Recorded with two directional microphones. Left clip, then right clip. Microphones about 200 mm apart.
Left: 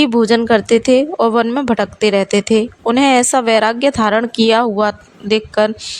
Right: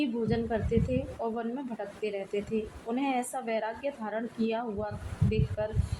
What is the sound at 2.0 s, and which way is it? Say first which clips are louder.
Speech: left 18 dB; 60° left (ahead or behind).